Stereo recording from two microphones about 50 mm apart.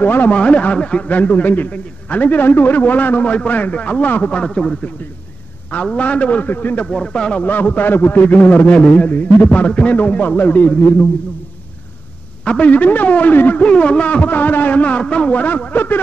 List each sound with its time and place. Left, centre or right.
0.0 s a man's voice: left
0.3 s a man's voice: left
1.0 s a man's voice: left
5.9 s a man's voice: left
6.4 s a man's voice: left
6.9 s speech: centre
7.4 s a man's voice: left
12.4 s a man's voice: left
13.6 s a man's voice: left